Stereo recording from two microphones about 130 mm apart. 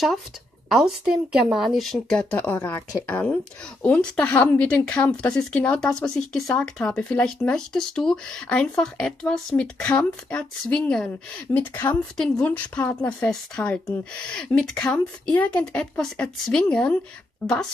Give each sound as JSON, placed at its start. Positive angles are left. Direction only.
{"t": 0.7, "sound": "a woman's voice", "side_deg": -5}
{"t": 11.5, "sound": "a woman's voice", "side_deg": 15}